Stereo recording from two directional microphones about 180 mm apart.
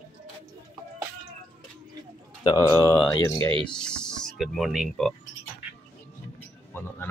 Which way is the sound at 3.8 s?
5° left (ahead or behind).